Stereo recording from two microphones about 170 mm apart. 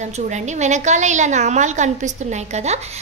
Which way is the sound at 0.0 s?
45° right (ahead or behind).